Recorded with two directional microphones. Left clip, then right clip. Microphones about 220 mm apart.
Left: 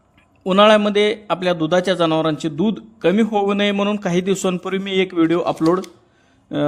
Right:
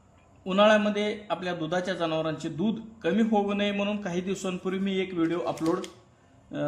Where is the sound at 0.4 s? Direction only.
40° left (ahead or behind).